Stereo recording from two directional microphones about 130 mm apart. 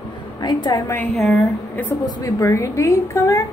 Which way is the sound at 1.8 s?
25° left (ahead or behind).